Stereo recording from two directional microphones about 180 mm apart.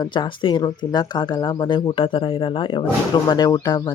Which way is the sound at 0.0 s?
25° left (ahead or behind).